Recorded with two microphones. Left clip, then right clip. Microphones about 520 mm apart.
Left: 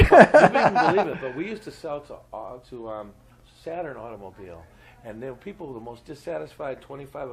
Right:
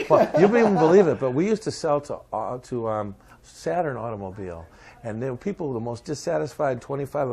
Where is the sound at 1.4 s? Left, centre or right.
Right.